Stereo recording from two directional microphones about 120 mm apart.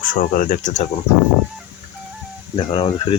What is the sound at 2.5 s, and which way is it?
Speech, 50° left (ahead or behind).